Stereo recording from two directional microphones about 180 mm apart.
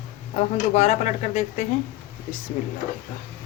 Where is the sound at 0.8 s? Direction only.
40° left (ahead or behind).